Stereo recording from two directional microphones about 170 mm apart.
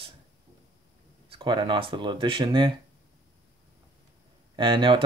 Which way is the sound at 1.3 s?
30° right (ahead or behind).